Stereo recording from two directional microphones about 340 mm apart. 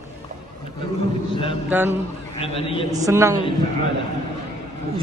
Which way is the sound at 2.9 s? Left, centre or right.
Centre.